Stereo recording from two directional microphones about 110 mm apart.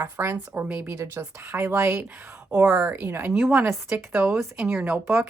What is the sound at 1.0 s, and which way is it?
A woman's voice, 25° right (ahead or behind).